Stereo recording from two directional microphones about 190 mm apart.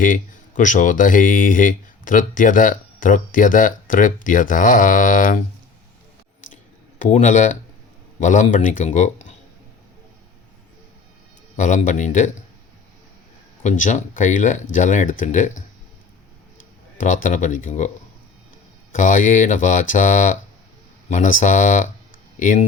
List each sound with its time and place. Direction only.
0.0 s speech: 45° left (ahead or behind)
7.0 s speech: 40° left (ahead or behind)
11.5 s speech: 40° left (ahead or behind)
13.6 s speech: 40° left (ahead or behind)
17.0 s speech: 45° left (ahead or behind)